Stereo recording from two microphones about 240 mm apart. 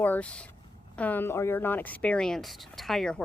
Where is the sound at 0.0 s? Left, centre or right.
Centre.